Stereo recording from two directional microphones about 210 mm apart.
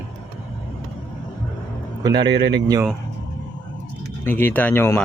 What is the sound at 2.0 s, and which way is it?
Speech, 20° right (ahead or behind).